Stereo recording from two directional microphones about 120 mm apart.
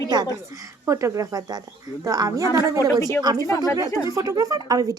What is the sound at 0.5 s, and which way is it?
A woman's voice, 30° right (ahead or behind).